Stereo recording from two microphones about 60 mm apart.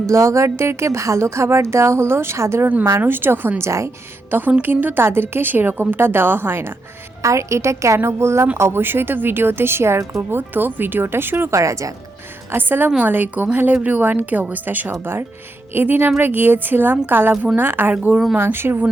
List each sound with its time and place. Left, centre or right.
0.1 s speech: right
3.0 s a woman's voice: right
3.6 s speech: right
4.3 s a woman's voice: right
7.2 s speech: right
8.8 s a woman's voice: right
12.5 s a woman's voice: right
17.3 s a woman's voice: centre
17.6 s a woman's voice: right